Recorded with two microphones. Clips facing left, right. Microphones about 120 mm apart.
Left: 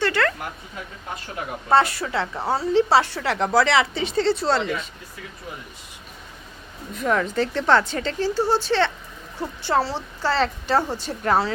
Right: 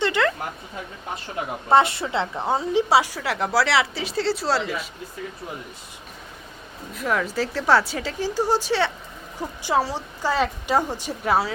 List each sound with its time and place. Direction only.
0.0 s a sound: 15° right (ahead or behind)
1.7 s a woman's voice: 25° right (ahead or behind); by 4.9 s 5° right (ahead or behind)
6.9 s a woman's voice: centre (ahead or behind)